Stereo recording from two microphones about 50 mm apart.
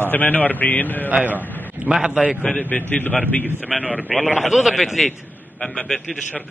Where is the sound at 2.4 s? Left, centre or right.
Left.